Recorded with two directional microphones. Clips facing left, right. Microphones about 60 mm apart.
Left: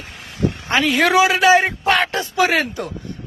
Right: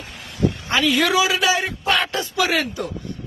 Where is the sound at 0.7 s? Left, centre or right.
Left.